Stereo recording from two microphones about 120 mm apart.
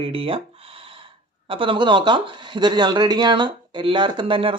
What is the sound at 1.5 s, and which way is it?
Speech, 45° right (ahead or behind).